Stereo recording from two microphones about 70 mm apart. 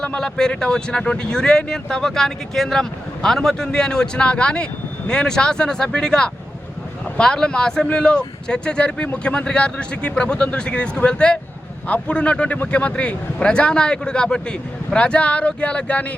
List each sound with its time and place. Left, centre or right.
0.0 s speech: centre